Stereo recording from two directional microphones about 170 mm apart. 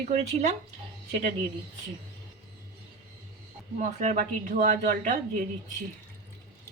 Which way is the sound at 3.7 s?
45° right (ahead or behind).